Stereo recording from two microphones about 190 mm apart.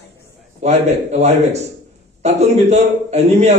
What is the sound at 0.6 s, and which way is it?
A man's voice, 35° right (ahead or behind).